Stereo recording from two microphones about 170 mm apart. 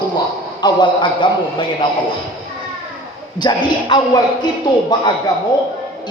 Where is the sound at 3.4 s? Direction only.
25° left (ahead or behind).